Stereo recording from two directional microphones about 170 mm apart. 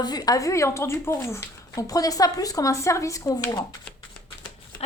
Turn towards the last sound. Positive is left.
turn(degrees=20)  # may be behind; listen again after turning